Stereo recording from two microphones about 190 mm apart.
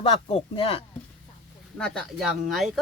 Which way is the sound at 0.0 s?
30° left (ahead or behind).